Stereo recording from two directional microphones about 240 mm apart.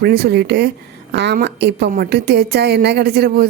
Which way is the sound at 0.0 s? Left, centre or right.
Right.